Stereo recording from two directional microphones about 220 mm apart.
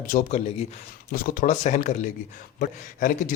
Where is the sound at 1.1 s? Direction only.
40° left (ahead or behind).